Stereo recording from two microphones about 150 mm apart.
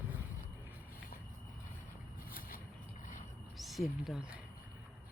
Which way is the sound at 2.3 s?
70° left (ahead or behind).